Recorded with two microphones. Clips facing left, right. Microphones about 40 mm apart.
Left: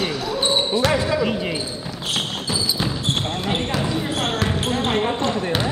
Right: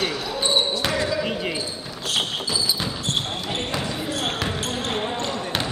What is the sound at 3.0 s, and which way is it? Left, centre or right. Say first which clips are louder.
Basketball bounce: left 3 dB; left.